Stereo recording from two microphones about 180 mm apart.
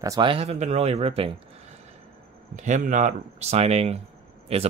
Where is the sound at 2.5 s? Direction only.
45° right (ahead or behind).